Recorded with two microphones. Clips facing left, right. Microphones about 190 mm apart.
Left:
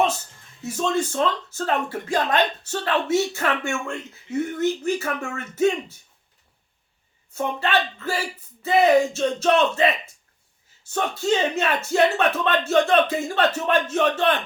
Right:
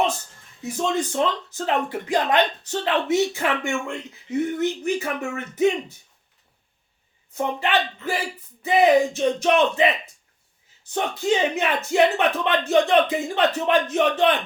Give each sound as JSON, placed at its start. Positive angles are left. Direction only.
{"t": 0.6, "sound": "speech", "side_deg": -15}
{"t": 7.3, "sound": "speech", "side_deg": -15}
{"t": 10.8, "sound": "speech", "side_deg": -15}